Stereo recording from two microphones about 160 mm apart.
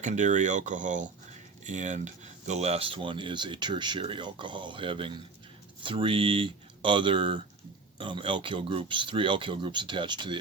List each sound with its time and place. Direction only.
0.0 s speech: 50° right (ahead or behind); by 10.3 s 30° right (ahead or behind)